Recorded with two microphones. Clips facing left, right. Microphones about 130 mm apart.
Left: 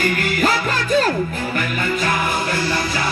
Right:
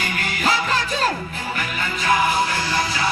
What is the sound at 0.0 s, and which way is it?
Music, 45° left (ahead or behind).